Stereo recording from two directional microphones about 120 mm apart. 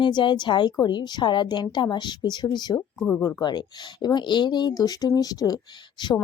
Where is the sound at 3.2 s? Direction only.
30° left (ahead or behind).